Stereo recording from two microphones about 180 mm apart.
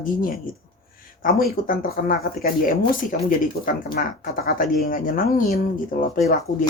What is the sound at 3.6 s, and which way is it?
Speech, 50° left (ahead or behind).